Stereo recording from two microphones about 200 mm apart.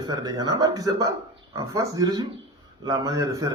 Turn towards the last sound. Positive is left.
turn(degrees=-15)  # may be behind; listen again after turning